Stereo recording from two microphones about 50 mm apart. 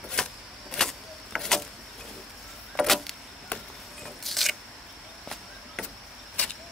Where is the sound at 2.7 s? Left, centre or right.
Centre.